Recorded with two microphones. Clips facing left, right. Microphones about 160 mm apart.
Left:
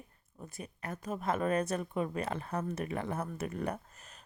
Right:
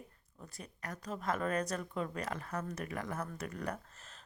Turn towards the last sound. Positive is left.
turn(degrees=25)  # may be behind; listen again after turning